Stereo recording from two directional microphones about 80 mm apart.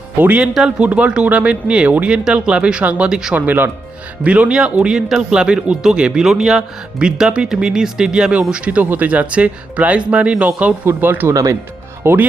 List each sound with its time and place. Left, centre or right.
0.2 s a man's voice: centre
3.3 s a man's voice: right
10.8 s speech: right